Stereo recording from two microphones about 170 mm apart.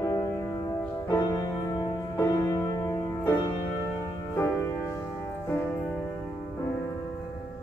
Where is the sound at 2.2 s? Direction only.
15° left (ahead or behind).